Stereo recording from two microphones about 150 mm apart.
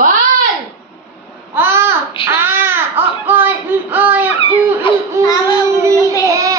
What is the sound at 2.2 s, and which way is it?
Baby cry, 15° right (ahead or behind).